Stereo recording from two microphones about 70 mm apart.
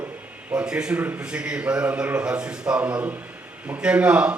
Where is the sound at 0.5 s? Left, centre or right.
Centre.